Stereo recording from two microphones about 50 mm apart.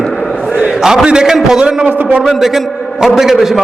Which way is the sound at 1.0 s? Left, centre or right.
Centre.